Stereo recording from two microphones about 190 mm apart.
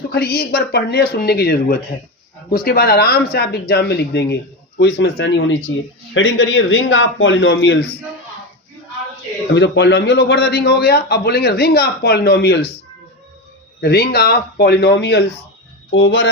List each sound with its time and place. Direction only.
0.1 s a man's voice: 55° left (ahead or behind)
9.6 s a man's voice: 65° left (ahead or behind)
13.8 s a man's voice: 55° left (ahead or behind)